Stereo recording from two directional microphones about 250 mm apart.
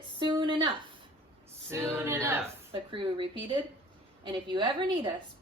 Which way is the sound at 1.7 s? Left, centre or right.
Centre.